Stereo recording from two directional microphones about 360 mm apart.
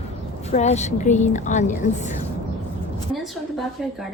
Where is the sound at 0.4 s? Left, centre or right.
Centre.